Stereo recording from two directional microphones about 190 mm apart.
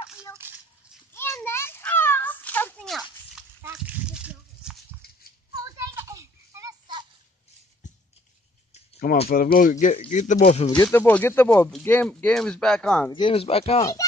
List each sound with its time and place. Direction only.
0.4 s a sound: 10° right (ahead or behind)
1.4 s children playing: 10° left (ahead or behind); by 4.7 s 5° right (ahead or behind)
5.8 s children playing: 15° right (ahead or behind)
9.3 s speech: 50° left (ahead or behind)
10.7 s speech: 15° left (ahead or behind)
13.1 s speech: 30° left (ahead or behind)